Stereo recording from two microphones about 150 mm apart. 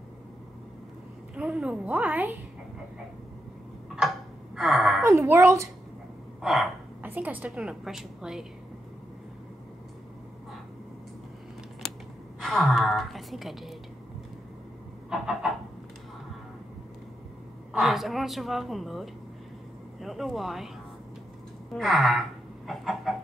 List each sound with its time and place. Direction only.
1.3 s a woman's voice: 5° right (ahead or behind)
3.9 s a sound: centre (ahead or behind)
4.6 s a woman's voice: centre (ahead or behind)
5.0 s speech: 20° right (ahead or behind)
6.4 s a woman's voice: centre (ahead or behind)
7.0 s a woman's voice: 10° right (ahead or behind)
12.4 s a woman's voice: centre (ahead or behind)
15.0 s a sound: centre (ahead or behind)
17.7 s a woman's voice: centre (ahead or behind)
21.7 s a woman's voice: centre (ahead or behind)
22.7 s chicken: centre (ahead or behind)